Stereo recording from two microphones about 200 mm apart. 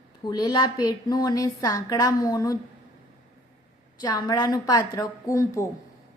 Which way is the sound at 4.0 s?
20° left (ahead or behind).